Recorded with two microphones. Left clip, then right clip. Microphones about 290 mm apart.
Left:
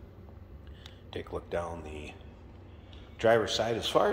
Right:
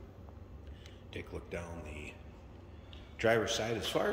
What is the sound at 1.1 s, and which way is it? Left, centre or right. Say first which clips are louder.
Speech: left 8 dB; centre.